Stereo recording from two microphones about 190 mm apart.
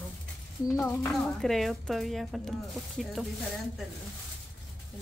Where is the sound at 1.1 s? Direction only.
Centre (ahead or behind).